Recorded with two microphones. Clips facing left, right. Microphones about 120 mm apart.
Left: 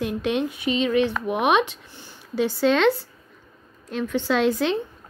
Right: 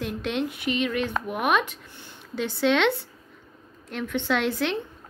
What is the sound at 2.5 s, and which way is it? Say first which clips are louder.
Speech: left 2 dB; centre (ahead or behind).